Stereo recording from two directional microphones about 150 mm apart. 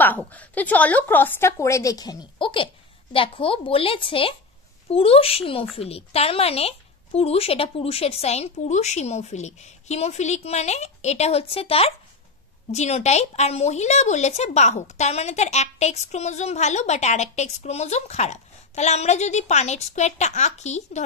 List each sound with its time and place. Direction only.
0.0 s a woman's voice: 10° left (ahead or behind); by 21.0 s 50° left (ahead or behind)